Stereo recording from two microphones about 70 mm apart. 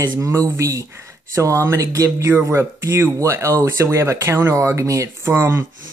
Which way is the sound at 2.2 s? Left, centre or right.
Right.